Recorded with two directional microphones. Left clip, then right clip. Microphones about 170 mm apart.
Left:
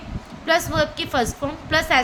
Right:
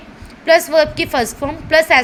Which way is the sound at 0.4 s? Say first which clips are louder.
Right 8 dB; 30° right (ahead or behind).